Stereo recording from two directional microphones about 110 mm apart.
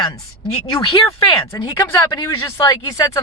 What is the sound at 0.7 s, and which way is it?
Speech, 45° left (ahead or behind).